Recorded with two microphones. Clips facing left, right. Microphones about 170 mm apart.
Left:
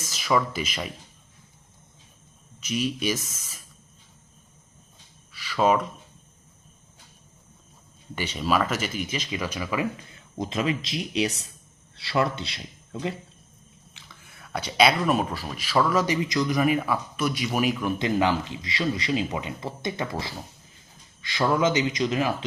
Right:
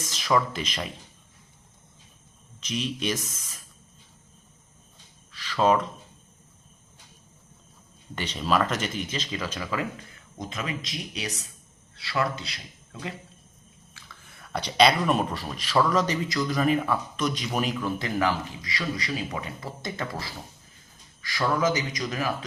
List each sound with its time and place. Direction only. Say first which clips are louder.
0.1 s speech: even; 5° left (ahead or behind)
2.6 s speech: left 3 dB; 5° left (ahead or behind)
5.3 s a sound: even; 10° left (ahead or behind)
8.1 s speech: left 1 dB; 10° left (ahead or behind)
10.3 s speech: left 7 dB; 30° left (ahead or behind)
13.9 s a sound: right 1 dB; 15° left (ahead or behind)
14.3 s speech: right 1 dB; 5° left (ahead or behind); by 22.4 s 25° left (ahead or behind)